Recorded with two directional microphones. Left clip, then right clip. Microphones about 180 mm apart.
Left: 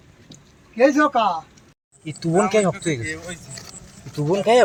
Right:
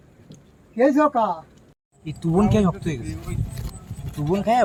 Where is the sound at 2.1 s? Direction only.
35° left (ahead or behind).